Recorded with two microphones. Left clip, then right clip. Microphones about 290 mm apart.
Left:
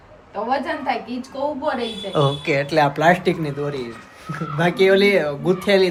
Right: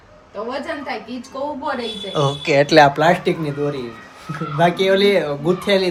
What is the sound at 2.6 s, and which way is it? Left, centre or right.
Speech, right.